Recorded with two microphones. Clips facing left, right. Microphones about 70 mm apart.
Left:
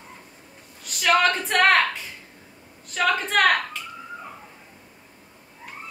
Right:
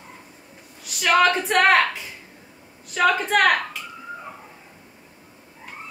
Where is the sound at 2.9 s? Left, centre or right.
Centre.